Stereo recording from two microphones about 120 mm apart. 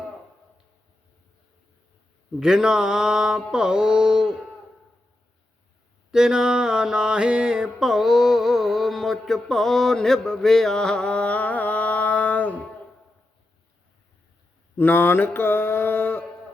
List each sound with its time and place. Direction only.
2.4 s mantra: 5° right (ahead or behind)
6.1 s mantra: 5° right (ahead or behind); by 12.6 s 15° left (ahead or behind)
14.8 s mantra: 15° left (ahead or behind)